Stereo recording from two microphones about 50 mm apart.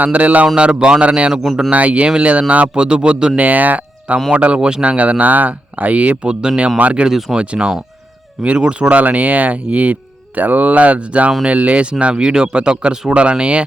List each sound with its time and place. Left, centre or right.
0.0 s speech: right
1.3 s speech: centre
1.7 s speech: right
3.3 s speech: right
7.1 s speech: centre
7.3 s speech: centre